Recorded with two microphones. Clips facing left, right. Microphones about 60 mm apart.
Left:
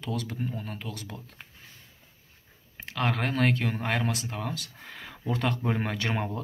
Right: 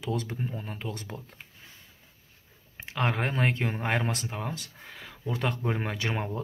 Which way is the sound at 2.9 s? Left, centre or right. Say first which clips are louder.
Even; right.